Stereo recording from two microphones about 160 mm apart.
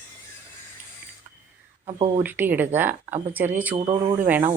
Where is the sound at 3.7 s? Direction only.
30° right (ahead or behind).